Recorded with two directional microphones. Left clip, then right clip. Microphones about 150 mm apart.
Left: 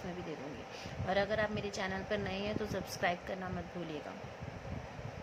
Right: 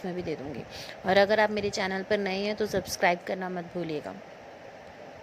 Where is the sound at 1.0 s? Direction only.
60° right (ahead or behind).